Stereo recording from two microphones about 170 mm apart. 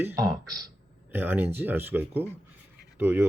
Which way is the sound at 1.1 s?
10° right (ahead or behind).